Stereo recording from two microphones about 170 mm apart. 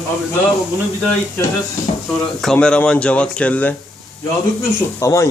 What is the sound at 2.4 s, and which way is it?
Speech, 5° left (ahead or behind).